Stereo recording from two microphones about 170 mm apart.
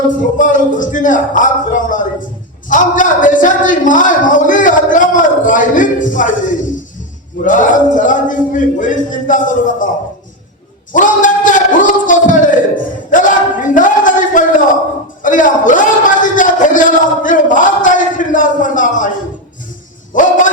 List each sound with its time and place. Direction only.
0.3 s a man's voice: 50° left (ahead or behind)
10.9 s a sound: 50° left (ahead or behind)
15.2 s a man's voice: 50° left (ahead or behind)
20.1 s a man's voice: 50° left (ahead or behind)